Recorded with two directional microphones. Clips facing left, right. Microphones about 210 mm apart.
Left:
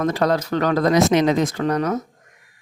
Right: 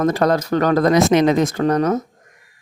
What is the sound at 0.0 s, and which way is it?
Speech, 45° right (ahead or behind).